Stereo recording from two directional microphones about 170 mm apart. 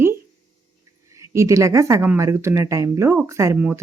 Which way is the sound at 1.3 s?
20° right (ahead or behind).